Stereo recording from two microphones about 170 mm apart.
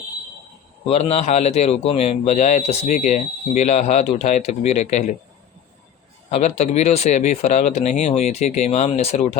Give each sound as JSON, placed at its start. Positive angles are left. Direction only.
{"t": 0.9, "sound": "a man's voice", "side_deg": 40}
{"t": 6.3, "sound": "a man's voice", "side_deg": 45}